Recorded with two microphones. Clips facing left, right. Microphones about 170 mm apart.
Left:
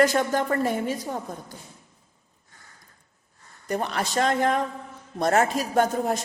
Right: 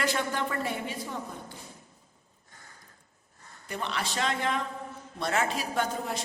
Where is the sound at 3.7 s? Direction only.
45° left (ahead or behind).